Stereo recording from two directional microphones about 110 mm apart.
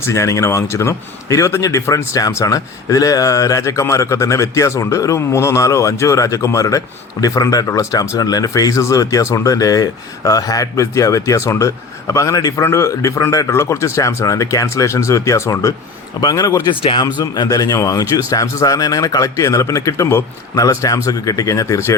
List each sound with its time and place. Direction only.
0.0 s speech: 30° left (ahead or behind)
16.8 s speech: 45° left (ahead or behind); by 21.9 s 25° left (ahead or behind)